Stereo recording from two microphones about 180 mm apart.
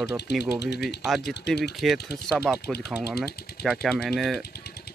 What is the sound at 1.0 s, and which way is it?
Speech, centre (ahead or behind).